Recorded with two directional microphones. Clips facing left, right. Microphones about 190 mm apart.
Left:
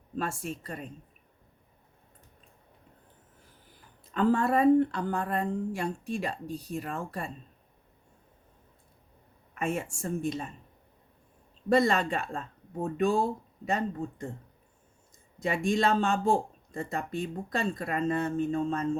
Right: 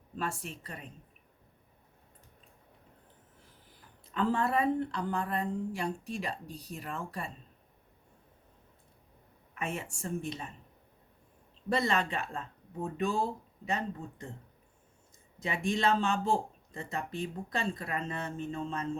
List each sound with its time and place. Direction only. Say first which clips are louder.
0.2 s speech: left 4 dB; 50° left (ahead or behind)
4.1 s speech: left 5 dB; 45° left (ahead or behind)
9.6 s speech: left 6 dB; 50° left (ahead or behind)
11.7 s speech: left 6 dB; 45° left (ahead or behind)
15.4 s speech: left 5 dB; 50° left (ahead or behind)